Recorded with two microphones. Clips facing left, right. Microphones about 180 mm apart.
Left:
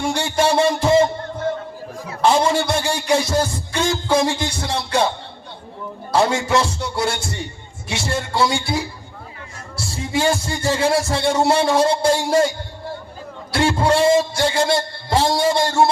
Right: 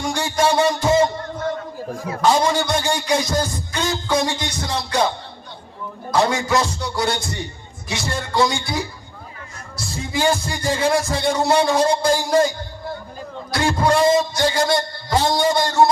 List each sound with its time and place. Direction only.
0.0 s music: 30° left (ahead or behind)
6.1 s music: 30° left (ahead or behind)
13.5 s music: 30° left (ahead or behind)